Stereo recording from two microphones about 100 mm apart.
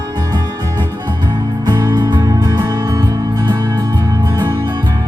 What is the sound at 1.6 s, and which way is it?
Music, 45° right (ahead or behind).